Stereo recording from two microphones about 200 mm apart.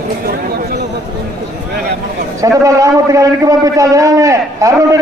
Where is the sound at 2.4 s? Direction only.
15° right (ahead or behind).